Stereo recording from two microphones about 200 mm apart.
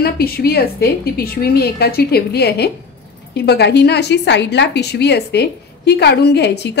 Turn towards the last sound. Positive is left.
turn(degrees=55)  # may be behind; listen again after turning